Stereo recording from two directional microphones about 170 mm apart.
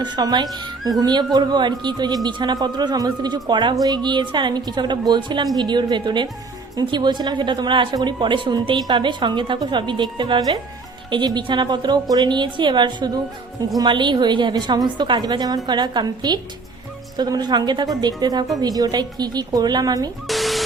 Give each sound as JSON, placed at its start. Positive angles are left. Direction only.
{"t": 0.0, "sound": "a woman's voice", "side_deg": -25}
{"t": 20.2, "sound": "speech", "side_deg": 0}